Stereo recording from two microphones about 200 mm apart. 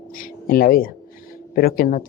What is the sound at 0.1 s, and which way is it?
Speech, 45° left (ahead or behind).